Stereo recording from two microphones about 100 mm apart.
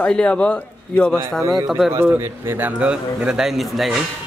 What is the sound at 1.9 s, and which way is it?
Speech, 25° right (ahead or behind).